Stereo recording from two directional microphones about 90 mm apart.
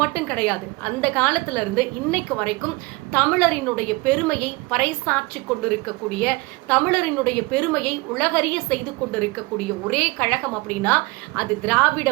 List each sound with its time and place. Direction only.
0.0 s a woman's voice: 15° left (ahead or behind)